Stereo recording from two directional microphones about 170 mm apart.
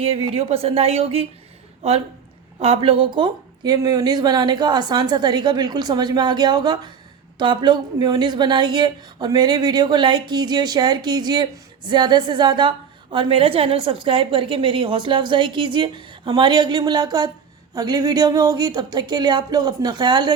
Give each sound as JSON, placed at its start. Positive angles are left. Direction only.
{"t": 0.0, "sound": "speech", "side_deg": -35}
{"t": 2.6, "sound": "a woman's voice", "side_deg": -35}